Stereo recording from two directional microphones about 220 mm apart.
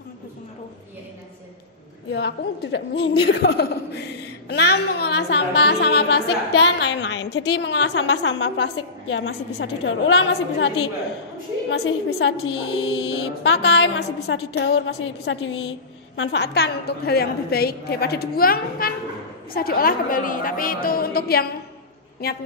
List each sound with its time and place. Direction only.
2.1 s a woman's voice: 50° left (ahead or behind)
11.8 s a woman's voice: 65° left (ahead or behind)
12.4 s speech: 25° left (ahead or behind)
13.4 s a woman's voice: 55° left (ahead or behind)